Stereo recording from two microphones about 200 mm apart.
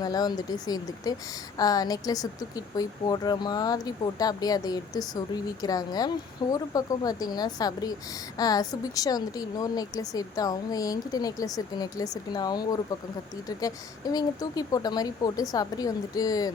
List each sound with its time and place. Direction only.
0.0 s a woman's voice: 20° left (ahead or behind)